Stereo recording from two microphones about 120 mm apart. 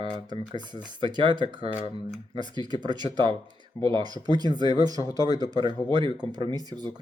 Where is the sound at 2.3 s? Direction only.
40° right (ahead or behind).